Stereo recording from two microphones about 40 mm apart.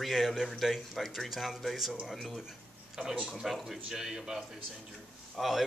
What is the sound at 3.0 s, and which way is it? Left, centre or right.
A man's voice, centre.